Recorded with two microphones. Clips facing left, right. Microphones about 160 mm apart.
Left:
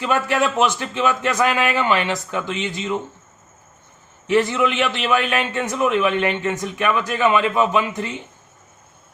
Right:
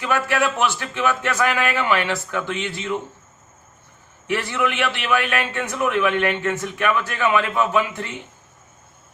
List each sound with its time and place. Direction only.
0.0 s a man's voice: 15° left (ahead or behind)
4.3 s a man's voice: 20° left (ahead or behind)